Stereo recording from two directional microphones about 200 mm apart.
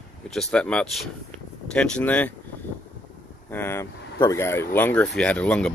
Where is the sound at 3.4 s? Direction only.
10° left (ahead or behind).